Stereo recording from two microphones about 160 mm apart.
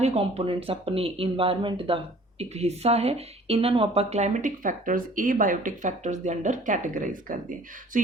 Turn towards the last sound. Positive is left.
turn(degrees=-55)  # may be behind; listen again after turning